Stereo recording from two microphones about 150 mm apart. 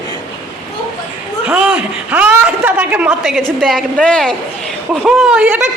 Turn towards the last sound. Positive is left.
turn(degrees=-10)  # may be behind; listen again after turning